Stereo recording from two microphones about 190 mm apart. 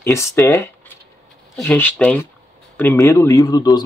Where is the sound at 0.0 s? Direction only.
15° left (ahead or behind).